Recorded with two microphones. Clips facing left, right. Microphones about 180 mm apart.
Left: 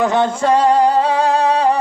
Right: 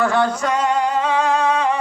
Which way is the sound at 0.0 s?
20° left (ahead or behind).